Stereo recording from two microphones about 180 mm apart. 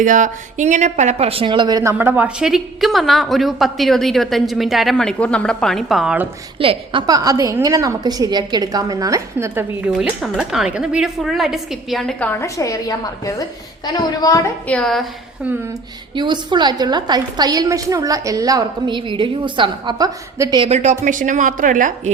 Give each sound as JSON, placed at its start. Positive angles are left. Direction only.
{"t": 0.0, "sound": "speech", "side_deg": -45}
{"t": 6.6, "sound": "a woman's voice", "side_deg": -30}
{"t": 14.7, "sound": "speech", "side_deg": 5}
{"t": 15.4, "sound": "speech", "side_deg": -10}
{"t": 16.1, "sound": "a woman's voice", "side_deg": -25}
{"t": 20.7, "sound": "a woman's voice", "side_deg": -40}